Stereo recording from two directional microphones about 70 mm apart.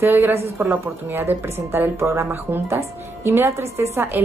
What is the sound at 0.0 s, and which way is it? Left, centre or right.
A woman's voice, right.